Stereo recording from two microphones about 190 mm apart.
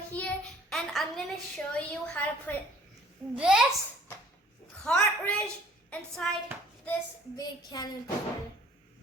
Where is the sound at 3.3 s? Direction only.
5° right (ahead or behind).